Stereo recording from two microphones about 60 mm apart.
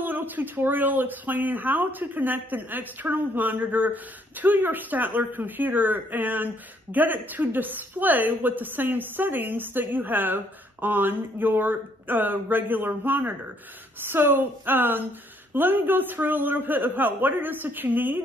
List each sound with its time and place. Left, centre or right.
0.0 s speech: right